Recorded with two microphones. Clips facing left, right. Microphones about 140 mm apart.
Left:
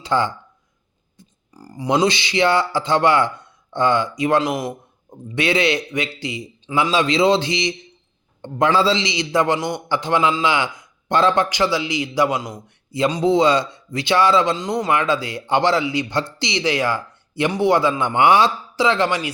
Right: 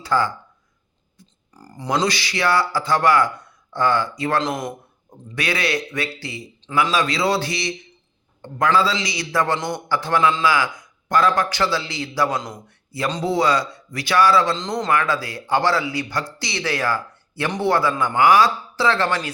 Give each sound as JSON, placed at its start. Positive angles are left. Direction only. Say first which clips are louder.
{"t": 0.0, "sound": "speech", "louder": "left 1 dB", "side_deg": 20}
{"t": 1.5, "sound": "speech", "louder": "left 5 dB", "side_deg": 10}
{"t": 1.9, "sound": "a man's voice", "louder": "left 4 dB", "side_deg": 25}
{"t": 5.3, "sound": "a man's voice", "louder": "left 5 dB", "side_deg": 25}